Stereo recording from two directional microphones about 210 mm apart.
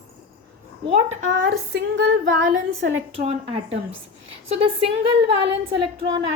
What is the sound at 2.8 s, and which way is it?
A woman's voice, 35° right (ahead or behind).